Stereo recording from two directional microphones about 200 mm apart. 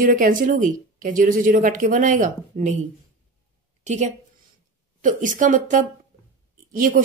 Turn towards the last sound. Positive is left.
turn(degrees=-45)  # may be behind; listen again after turning